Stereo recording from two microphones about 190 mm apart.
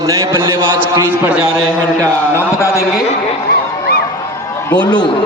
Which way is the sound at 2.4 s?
15° left (ahead or behind).